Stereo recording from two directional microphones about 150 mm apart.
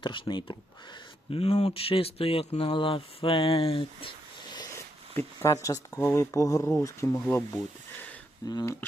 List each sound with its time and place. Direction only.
0.0 s speech: 30° left (ahead or behind)
4.5 s a sound: 20° left (ahead or behind)
5.6 s speech: 20° left (ahead or behind)